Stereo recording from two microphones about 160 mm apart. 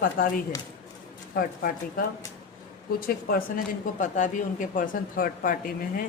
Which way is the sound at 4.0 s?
50° left (ahead or behind).